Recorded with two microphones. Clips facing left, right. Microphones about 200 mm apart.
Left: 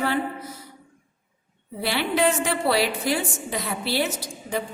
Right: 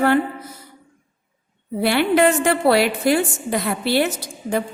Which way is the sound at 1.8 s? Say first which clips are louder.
Right 6 dB; 55° right (ahead or behind).